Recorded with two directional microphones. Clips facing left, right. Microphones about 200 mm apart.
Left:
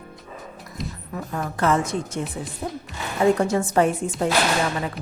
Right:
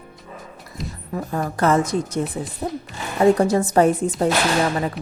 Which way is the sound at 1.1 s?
35° right (ahead or behind).